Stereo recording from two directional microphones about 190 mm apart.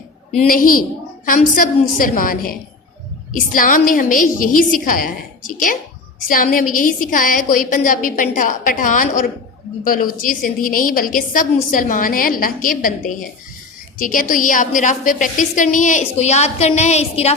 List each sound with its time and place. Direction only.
0.4 s a woman's voice: 50° left (ahead or behind)